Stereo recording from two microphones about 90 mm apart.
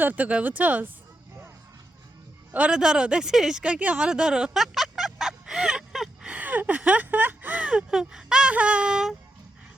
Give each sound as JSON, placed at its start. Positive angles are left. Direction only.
{"t": 0.0, "sound": "speech", "side_deg": -20}
{"t": 2.5, "sound": "speech", "side_deg": -10}
{"t": 6.3, "sound": "speech", "side_deg": -15}